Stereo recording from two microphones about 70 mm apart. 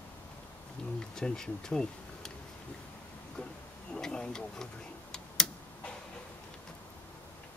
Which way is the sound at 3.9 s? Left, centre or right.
Centre.